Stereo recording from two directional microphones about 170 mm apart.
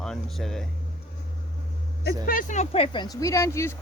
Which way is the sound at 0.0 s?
5° left (ahead or behind).